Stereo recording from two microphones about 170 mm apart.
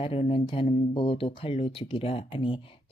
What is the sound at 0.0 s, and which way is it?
Speech, 35° left (ahead or behind).